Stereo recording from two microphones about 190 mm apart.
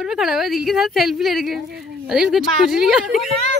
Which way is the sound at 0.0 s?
Centre (ahead or behind).